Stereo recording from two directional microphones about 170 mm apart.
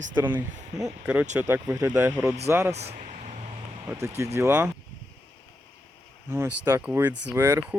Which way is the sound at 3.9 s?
15° right (ahead or behind).